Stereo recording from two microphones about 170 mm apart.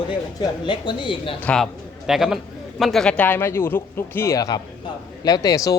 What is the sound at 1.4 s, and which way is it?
Speech, 5° left (ahead or behind).